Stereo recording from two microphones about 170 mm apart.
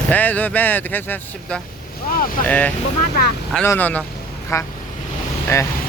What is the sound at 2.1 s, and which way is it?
Speech, 55° left (ahead or behind).